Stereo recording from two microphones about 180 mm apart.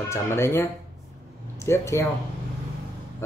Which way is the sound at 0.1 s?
15° left (ahead or behind).